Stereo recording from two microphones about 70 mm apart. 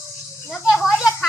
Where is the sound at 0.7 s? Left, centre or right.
Centre.